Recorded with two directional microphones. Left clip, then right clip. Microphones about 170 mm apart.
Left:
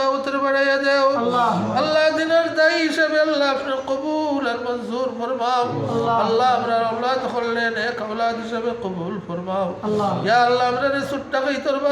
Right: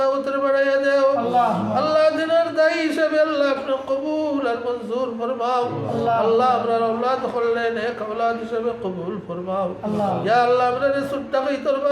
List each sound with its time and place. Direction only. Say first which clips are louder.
0.0 s a sound: even; 10° right (ahead or behind)
1.7 s a man's voice: right 2 dB; 10° right (ahead or behind)
10.2 s a man's voice: even; 10° right (ahead or behind)